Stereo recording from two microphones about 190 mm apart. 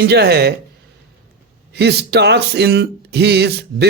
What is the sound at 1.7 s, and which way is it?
Speech, 60° right (ahead or behind).